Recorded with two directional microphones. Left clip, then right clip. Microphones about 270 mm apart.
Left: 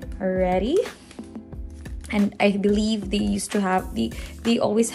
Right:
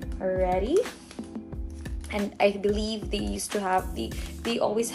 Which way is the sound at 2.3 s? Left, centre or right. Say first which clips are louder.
Left 2 dB; left.